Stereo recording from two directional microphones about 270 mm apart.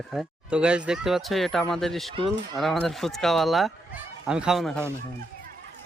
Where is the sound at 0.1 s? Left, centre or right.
Centre.